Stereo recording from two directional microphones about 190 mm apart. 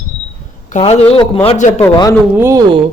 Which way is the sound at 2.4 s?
15° right (ahead or behind).